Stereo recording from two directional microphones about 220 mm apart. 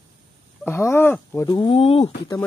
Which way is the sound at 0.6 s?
10° left (ahead or behind).